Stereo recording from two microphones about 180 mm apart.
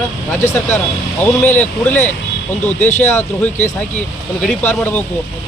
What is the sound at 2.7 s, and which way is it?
Speech, 40° left (ahead or behind).